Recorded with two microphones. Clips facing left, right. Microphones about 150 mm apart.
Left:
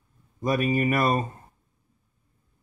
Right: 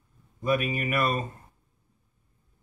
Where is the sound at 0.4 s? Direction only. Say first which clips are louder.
Left 3 dB; 35° left (ahead or behind).